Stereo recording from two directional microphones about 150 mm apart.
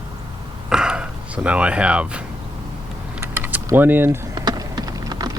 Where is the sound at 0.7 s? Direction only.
5° right (ahead or behind).